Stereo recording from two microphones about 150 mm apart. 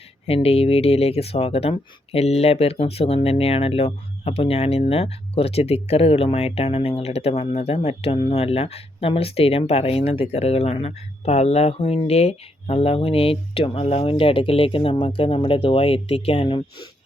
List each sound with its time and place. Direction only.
0.3 s speech: 40° left (ahead or behind)